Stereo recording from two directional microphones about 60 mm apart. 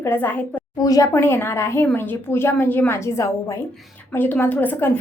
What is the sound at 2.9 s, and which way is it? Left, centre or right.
Speech, left.